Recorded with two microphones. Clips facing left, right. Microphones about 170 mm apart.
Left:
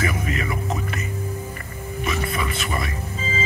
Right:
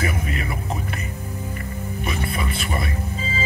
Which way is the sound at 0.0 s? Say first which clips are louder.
Left 1 dB; 35° right (ahead or behind).